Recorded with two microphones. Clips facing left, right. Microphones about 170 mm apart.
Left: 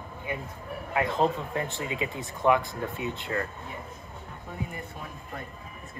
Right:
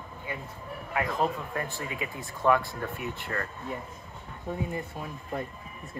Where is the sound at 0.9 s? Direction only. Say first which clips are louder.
Left 3 dB; 25° left (ahead or behind).